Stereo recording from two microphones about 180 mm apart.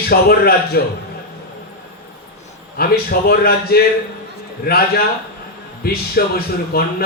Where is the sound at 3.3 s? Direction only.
60° left (ahead or behind).